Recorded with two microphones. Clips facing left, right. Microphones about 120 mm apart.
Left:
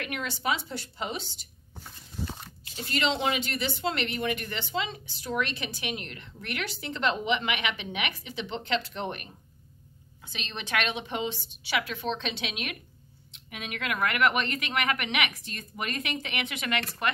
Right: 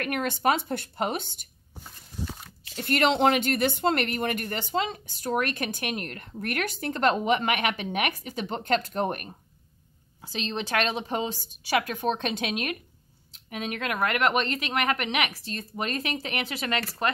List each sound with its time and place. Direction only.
0.0 s a woman's voice: 50° right (ahead or behind)
2.7 s a woman's voice: 55° right (ahead or behind); by 17.1 s 35° right (ahead or behind)